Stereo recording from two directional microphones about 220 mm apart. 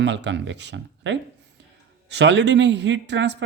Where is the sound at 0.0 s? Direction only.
50° right (ahead or behind).